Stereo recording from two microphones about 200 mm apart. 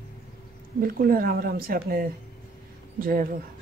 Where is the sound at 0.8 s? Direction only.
45° right (ahead or behind).